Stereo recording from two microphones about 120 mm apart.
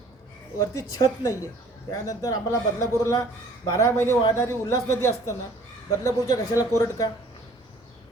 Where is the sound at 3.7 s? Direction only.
20° left (ahead or behind).